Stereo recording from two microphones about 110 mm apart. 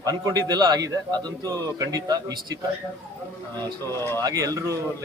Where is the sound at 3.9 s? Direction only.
25° left (ahead or behind).